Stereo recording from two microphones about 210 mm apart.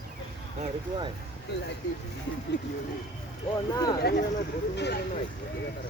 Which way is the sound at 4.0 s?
50° left (ahead or behind).